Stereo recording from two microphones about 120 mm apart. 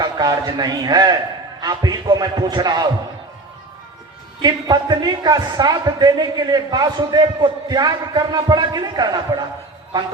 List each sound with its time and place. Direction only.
0.0 s a man's voice: 35° right (ahead or behind)
4.4 s a man's voice: 35° right (ahead or behind)